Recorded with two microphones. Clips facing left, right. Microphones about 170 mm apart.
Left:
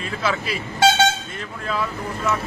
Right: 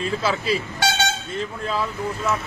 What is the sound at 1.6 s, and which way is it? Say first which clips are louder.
Speech: left 1 dB; 30° right (ahead or behind).